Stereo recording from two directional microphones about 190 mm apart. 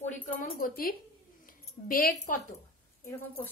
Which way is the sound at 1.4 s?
50° left (ahead or behind).